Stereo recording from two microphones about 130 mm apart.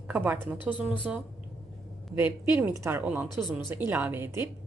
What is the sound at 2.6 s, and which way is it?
A woman's voice, 15° right (ahead or behind).